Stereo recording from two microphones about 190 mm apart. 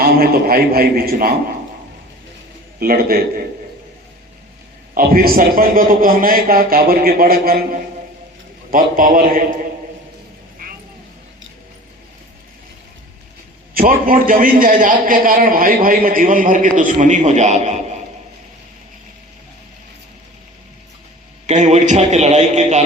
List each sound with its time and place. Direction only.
0.0 s a man's voice: 55° right (ahead or behind)
2.7 s a man's voice: 50° right (ahead or behind)
4.9 s a man's voice: 50° right (ahead or behind)
10.6 s vehicle: 45° right (ahead or behind)
13.7 s a man's voice: 45° right (ahead or behind)
21.4 s a man's voice: 40° right (ahead or behind)